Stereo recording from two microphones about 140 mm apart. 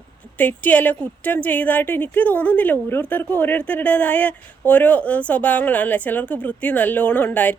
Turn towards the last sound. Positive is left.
turn(degrees=10)  # may be behind; listen again after turning